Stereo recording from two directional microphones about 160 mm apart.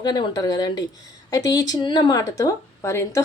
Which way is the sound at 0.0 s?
25° left (ahead or behind).